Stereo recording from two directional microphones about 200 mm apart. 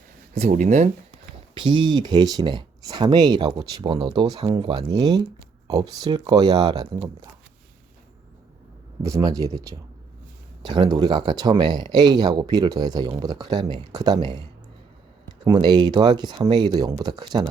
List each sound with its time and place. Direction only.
0.3 s speech: 35° right (ahead or behind)
1.5 s speech: 25° right (ahead or behind)
9.0 s speech: 15° right (ahead or behind)
10.6 s speech: 20° right (ahead or behind)
15.4 s speech: 20° right (ahead or behind)